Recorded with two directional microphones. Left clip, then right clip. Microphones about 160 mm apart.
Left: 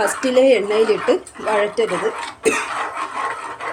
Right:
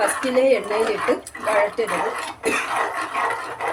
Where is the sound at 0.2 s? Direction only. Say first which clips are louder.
Left 6 dB; 55° left (ahead or behind).